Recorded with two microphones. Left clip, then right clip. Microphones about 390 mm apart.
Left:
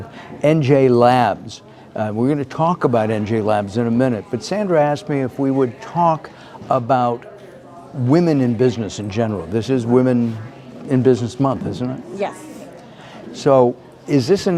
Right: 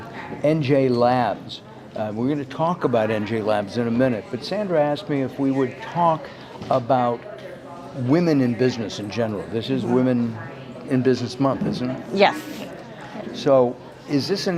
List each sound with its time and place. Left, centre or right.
0.4 s speech: left
12.1 s a woman's voice: right
13.4 s speech: left